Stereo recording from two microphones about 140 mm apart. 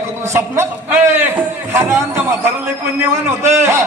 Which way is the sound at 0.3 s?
20° right (ahead or behind).